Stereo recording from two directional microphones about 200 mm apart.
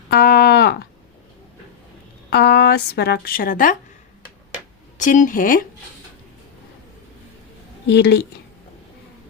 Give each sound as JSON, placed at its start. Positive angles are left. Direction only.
{"t": 0.1, "sound": "a sound", "side_deg": 55}
{"t": 2.3, "sound": "speech", "side_deg": 55}
{"t": 4.9, "sound": "speech", "side_deg": 40}
{"t": 7.9, "sound": "speech", "side_deg": 55}